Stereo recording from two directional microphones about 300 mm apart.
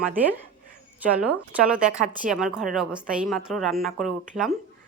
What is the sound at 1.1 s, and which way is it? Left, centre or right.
A woman's voice, centre.